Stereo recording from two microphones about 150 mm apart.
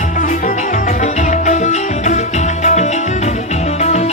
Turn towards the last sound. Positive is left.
turn(degrees=45)  # may be behind; listen again after turning